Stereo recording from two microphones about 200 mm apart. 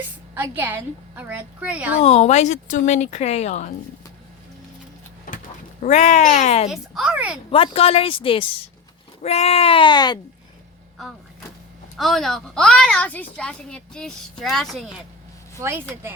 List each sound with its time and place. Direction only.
0.3 s a woman's voice: 10° right (ahead or behind)
2.0 s speech: 30° left (ahead or behind)
5.8 s speech: 35° left (ahead or behind)
6.7 s a woman's voice: 5° right (ahead or behind)
7.5 s speech: 25° left (ahead or behind)
11.9 s a woman's voice: centre (ahead or behind)
15.5 s a woman's voice: 10° right (ahead or behind)